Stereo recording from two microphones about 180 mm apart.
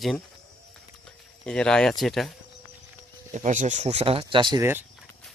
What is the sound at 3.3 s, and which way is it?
Speech, 45° right (ahead or behind).